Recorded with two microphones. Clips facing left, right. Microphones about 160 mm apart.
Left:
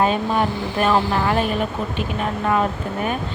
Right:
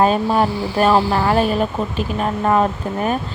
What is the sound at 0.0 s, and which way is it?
Speech, 40° right (ahead or behind).